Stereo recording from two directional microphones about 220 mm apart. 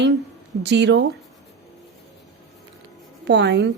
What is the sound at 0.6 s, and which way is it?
Speech, 50° right (ahead or behind).